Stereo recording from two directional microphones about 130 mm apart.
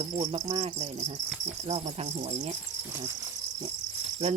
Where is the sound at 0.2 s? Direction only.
60° right (ahead or behind).